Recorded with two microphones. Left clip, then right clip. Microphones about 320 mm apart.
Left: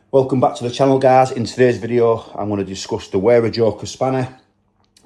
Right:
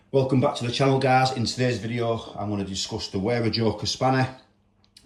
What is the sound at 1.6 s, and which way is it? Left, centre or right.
Speech, left.